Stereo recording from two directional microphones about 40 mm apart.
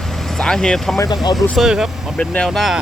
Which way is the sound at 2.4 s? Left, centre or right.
Centre.